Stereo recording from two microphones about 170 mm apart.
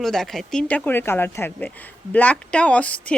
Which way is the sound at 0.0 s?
Centre (ahead or behind).